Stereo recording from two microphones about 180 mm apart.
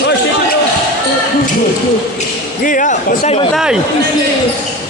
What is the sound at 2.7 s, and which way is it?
Speech, 50° left (ahead or behind).